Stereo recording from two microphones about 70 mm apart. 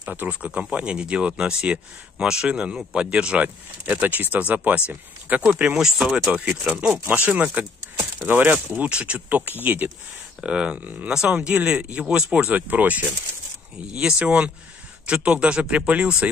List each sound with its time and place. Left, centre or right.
0.0 s speech: right
7.2 s speech: right
11.1 s speech: centre